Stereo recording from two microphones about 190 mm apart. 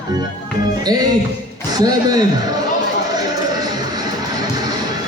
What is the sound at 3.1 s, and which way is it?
Music, 20° right (ahead or behind).